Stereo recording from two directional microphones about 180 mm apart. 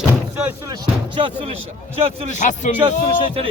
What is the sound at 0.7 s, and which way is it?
Speech, 25° right (ahead or behind).